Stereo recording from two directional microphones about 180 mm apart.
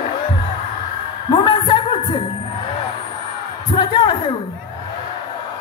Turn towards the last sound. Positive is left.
turn(degrees=25)  # may be behind; listen again after turning